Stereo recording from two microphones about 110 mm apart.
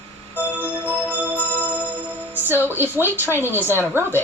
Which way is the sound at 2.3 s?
20° right (ahead or behind).